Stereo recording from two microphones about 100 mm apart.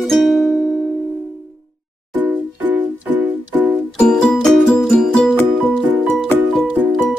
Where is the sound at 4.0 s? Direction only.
5° left (ahead or behind).